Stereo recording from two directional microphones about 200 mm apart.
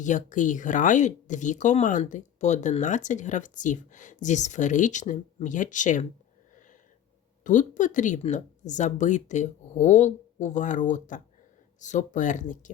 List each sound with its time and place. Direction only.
0.0 s speech: 40° left (ahead or behind)
7.4 s speech: 40° left (ahead or behind)